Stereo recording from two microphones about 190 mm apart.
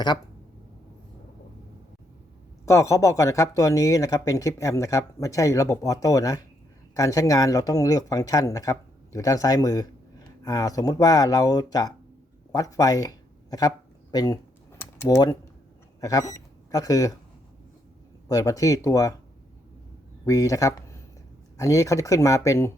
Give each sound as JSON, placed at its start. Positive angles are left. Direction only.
{"t": 2.6, "sound": "speech", "side_deg": 15}
{"t": 12.5, "sound": "a sound", "side_deg": 20}
{"t": 16.0, "sound": "speech", "side_deg": 20}
{"t": 18.3, "sound": "speech", "side_deg": 20}
{"t": 20.2, "sound": "speech", "side_deg": 15}